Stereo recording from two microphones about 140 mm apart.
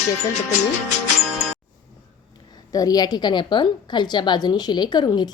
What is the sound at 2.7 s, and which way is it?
A woman's voice, 25° left (ahead or behind).